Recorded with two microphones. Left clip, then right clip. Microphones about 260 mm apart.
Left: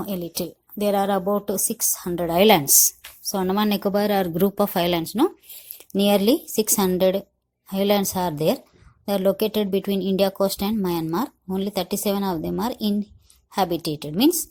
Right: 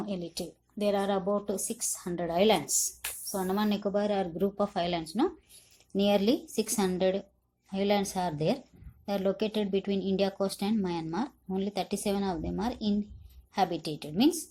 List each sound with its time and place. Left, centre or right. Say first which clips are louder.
0.0 s speech: left 8 dB; left